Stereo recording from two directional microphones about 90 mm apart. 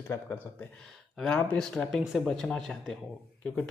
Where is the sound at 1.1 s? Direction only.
5° left (ahead or behind).